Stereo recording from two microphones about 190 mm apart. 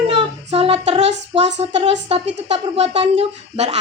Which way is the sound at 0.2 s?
30° right (ahead or behind).